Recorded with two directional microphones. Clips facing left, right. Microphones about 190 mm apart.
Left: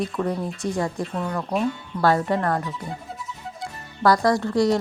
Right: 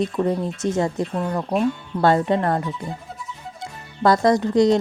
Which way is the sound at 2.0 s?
20° right (ahead or behind).